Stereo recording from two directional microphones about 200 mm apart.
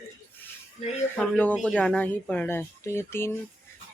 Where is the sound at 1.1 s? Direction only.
5° left (ahead or behind).